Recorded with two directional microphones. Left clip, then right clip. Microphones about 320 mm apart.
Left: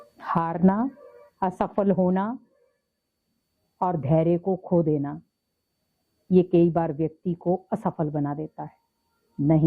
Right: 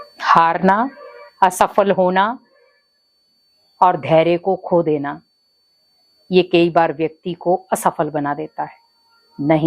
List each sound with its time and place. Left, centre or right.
0.2 s speech: centre
3.8 s speech: centre
4.4 s speech: centre
6.3 s speech: centre
7.4 s speech: centre